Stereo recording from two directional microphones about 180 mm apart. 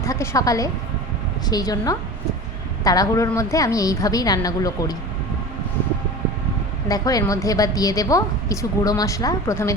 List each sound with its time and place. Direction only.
0.0 s a woman's voice: 15° left (ahead or behind)
6.8 s a woman's voice: 20° left (ahead or behind)